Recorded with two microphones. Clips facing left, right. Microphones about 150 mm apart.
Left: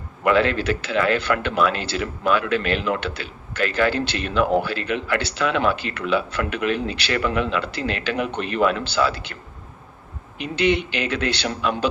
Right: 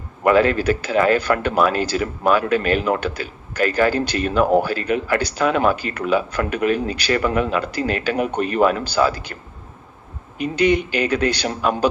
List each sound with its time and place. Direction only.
0.3 s speech: 45° right (ahead or behind)
10.3 s speech: 45° right (ahead or behind)